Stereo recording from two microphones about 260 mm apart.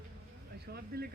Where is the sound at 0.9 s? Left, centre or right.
Right.